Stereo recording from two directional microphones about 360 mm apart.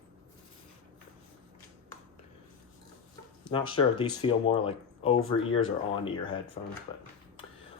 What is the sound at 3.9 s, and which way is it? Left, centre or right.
Speech, centre.